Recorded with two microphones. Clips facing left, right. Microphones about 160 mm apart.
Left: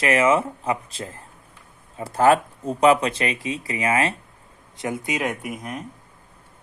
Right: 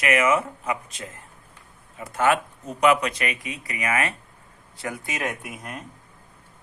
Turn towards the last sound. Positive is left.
turn(degrees=10)  # may be behind; listen again after turning